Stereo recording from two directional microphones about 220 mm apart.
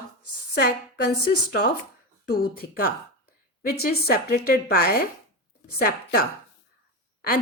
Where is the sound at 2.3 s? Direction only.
45° left (ahead or behind).